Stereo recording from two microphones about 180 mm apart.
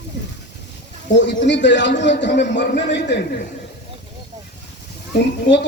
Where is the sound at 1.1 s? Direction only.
80° left.